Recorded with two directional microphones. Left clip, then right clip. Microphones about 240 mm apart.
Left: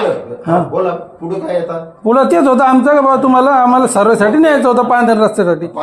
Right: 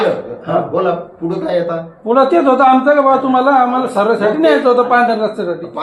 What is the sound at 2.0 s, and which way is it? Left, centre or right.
A man's voice, left.